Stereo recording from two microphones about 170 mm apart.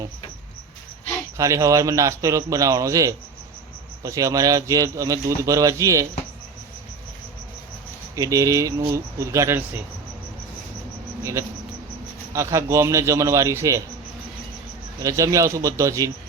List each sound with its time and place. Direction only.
1.4 s speech: 20° right (ahead or behind)
8.1 s speech: 20° right (ahead or behind)
11.2 s speech: 15° right (ahead or behind)
15.0 s speech: 20° right (ahead or behind)